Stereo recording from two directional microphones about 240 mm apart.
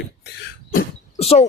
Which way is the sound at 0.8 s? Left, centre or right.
Left.